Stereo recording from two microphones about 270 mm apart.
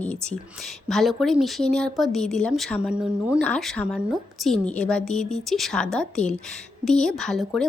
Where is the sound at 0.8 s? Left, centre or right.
Centre.